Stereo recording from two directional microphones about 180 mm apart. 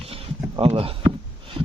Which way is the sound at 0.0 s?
30° right (ahead or behind).